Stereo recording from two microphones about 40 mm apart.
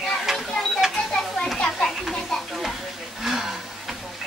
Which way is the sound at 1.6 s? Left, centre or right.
Centre.